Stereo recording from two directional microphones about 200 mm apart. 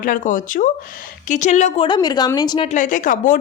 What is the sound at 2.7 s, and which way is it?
Speech, 40° left (ahead or behind).